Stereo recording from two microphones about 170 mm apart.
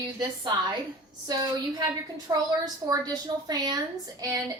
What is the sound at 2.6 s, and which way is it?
A woman's voice, 20° right (ahead or behind).